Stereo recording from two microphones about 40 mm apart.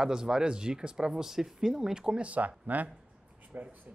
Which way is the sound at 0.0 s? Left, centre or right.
Centre.